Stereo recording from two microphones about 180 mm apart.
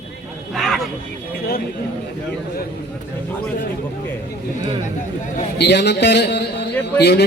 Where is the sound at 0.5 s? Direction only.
Centre (ahead or behind).